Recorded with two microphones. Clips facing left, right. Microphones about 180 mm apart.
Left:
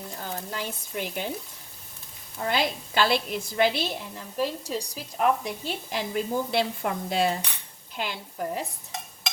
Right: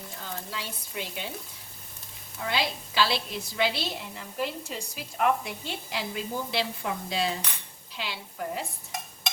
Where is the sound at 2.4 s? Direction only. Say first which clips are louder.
Left 3 dB; 50° left (ahead or behind).